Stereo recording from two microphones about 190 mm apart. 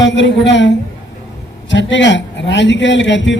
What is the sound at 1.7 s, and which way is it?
A man's voice, 75° left (ahead or behind).